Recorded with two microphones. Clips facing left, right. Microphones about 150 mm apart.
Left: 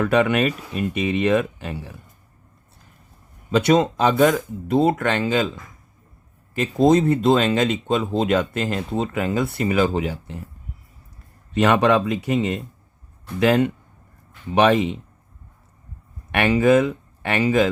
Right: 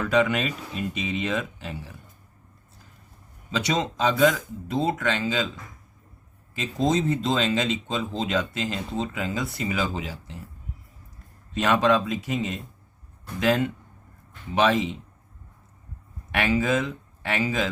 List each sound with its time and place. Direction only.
0.0 s speech: 60° left (ahead or behind)
3.5 s speech: 55° left (ahead or behind)
6.5 s speech: 55° left (ahead or behind)
11.5 s speech: 65° left (ahead or behind)
16.3 s speech: 60° left (ahead or behind)